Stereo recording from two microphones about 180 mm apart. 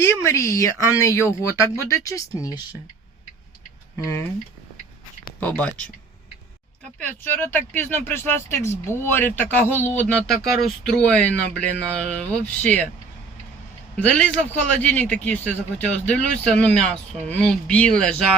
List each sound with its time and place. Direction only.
0.0 s speech: 15° left (ahead or behind)
5.4 s speech: 10° left (ahead or behind)
7.0 s speech: 10° left (ahead or behind)
13.9 s speech: 5° left (ahead or behind)